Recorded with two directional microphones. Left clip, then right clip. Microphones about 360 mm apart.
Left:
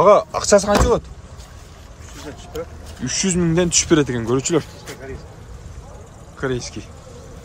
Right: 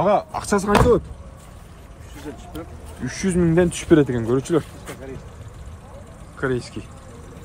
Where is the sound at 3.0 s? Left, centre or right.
Centre.